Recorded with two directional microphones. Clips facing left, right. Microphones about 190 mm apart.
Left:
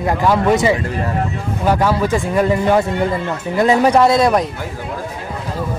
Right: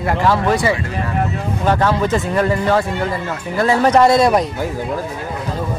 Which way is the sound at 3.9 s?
Centre (ahead or behind).